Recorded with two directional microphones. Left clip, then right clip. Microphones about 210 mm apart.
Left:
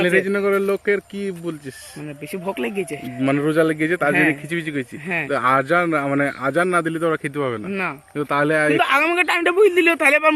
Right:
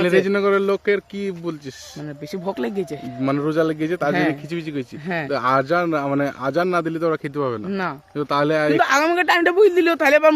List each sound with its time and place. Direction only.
0.0 s a man's voice: centre (ahead or behind)
2.3 s speech: 25° right (ahead or behind)
3.2 s a man's voice: 15° left (ahead or behind)
5.0 s speech: 30° right (ahead or behind)
5.3 s a man's voice: 5° left (ahead or behind)
7.7 s speech: 25° right (ahead or behind)
8.1 s a man's voice: centre (ahead or behind)
8.7 s speech: 30° right (ahead or behind)